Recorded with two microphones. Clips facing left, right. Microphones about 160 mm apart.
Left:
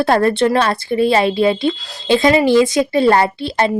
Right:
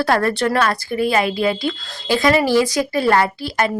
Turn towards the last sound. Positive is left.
turn(degrees=25)  # may be behind; listen again after turning